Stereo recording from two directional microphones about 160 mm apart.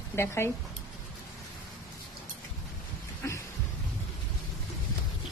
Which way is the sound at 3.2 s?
15° left (ahead or behind).